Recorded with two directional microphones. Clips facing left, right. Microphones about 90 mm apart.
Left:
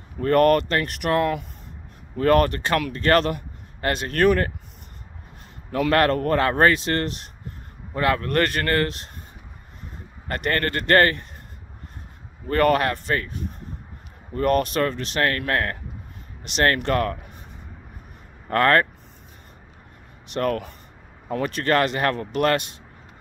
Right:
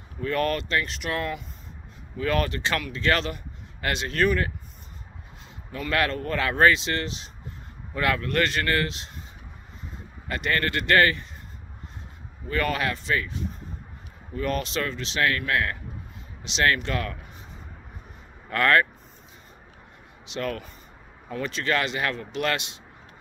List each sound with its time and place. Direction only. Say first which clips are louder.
0.2 s speech: left 9 dB; 55° left (ahead or behind)
5.7 s speech: left 7 dB; 55° left (ahead or behind)
7.9 s speech: left 3 dB; 35° left (ahead or behind)
8.3 s speech: left 3 dB; 50° left (ahead or behind)
10.2 s speech: left 2 dB; 50° left (ahead or behind)
12.4 s speech: left 7 dB; 50° left (ahead or behind)
18.5 s speech: left 3 dB; 40° left (ahead or behind)
20.2 s speech: left 6 dB; 50° left (ahead or behind)